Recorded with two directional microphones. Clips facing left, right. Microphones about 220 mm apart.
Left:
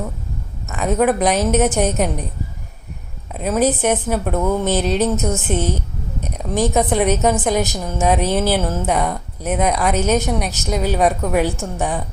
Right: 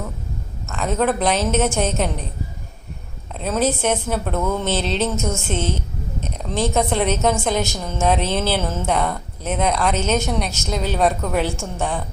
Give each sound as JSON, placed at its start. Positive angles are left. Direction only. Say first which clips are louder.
{"t": 0.7, "sound": "speech", "louder": "left 3 dB", "side_deg": 10}
{"t": 3.3, "sound": "speech", "louder": "left 3 dB", "side_deg": 10}
{"t": 6.2, "sound": "a sound", "louder": "left 4 dB", "side_deg": 10}
{"t": 6.7, "sound": "speech", "louder": "left 3 dB", "side_deg": 10}